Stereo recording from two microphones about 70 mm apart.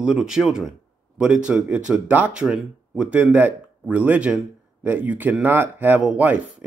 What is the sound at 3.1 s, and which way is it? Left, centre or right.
Speech, centre.